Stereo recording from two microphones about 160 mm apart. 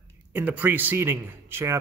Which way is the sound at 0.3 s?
10° right (ahead or behind).